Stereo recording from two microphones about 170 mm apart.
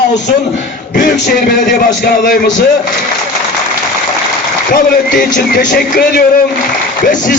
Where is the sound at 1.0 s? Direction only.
70° left (ahead or behind).